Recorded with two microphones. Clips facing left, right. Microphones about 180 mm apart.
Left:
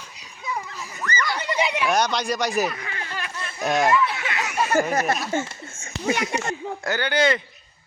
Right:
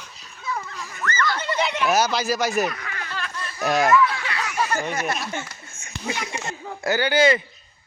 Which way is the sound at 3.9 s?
25° left (ahead or behind).